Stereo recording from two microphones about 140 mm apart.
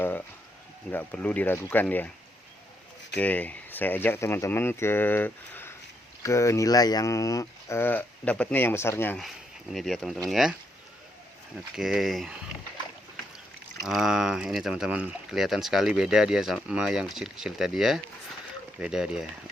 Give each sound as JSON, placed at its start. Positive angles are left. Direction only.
{"t": 0.9, "sound": "speech", "side_deg": 10}
{"t": 3.2, "sound": "speech", "side_deg": 10}
{"t": 9.1, "sound": "speech", "side_deg": 0}
{"t": 11.7, "sound": "speech", "side_deg": 0}
{"t": 13.8, "sound": "speech", "side_deg": -5}